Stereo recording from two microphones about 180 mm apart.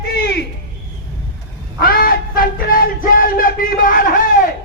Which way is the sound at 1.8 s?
55° left (ahead or behind).